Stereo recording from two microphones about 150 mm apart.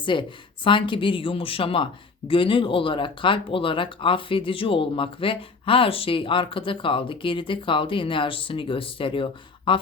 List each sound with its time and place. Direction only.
0.0 s speech: 35° left (ahead or behind)